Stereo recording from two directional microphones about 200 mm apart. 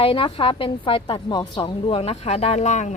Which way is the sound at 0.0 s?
25° left (ahead or behind).